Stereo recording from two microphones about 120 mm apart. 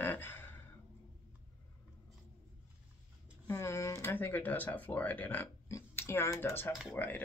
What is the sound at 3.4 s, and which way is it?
Speech, 25° left (ahead or behind).